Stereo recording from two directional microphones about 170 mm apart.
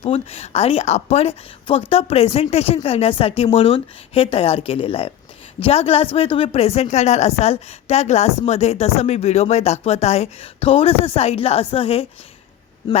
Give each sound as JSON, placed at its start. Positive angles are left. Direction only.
{"t": 0.0, "sound": "speech", "side_deg": 35}